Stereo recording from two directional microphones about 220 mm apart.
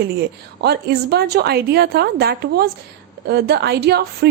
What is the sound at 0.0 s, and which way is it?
A woman's voice, 45° right (ahead or behind).